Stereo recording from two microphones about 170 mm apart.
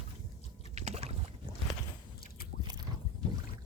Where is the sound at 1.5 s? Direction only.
30° right (ahead or behind).